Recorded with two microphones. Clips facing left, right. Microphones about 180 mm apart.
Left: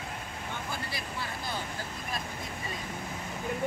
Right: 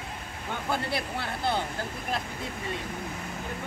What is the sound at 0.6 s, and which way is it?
Speech, 60° right (ahead or behind).